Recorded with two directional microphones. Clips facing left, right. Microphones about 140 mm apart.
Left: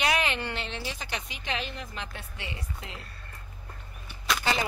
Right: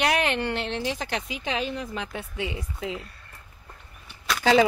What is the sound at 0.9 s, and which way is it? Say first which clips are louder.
Speech: right 7 dB; 90° right.